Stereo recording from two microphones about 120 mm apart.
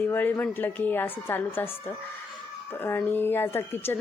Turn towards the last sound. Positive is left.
turn(degrees=20)  # may be behind; listen again after turning